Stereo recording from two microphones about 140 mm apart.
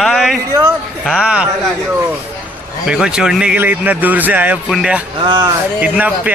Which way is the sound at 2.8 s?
5° right (ahead or behind).